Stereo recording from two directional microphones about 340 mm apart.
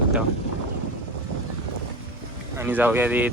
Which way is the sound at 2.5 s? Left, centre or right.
Centre.